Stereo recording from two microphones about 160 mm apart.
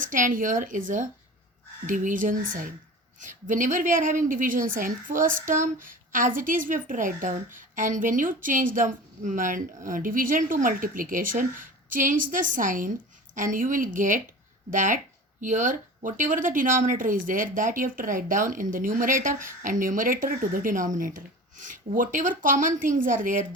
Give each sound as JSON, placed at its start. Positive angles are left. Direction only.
{"t": 0.0, "sound": "a woman's voice", "side_deg": -55}